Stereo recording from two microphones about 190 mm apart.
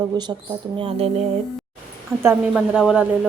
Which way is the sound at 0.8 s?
30° right (ahead or behind).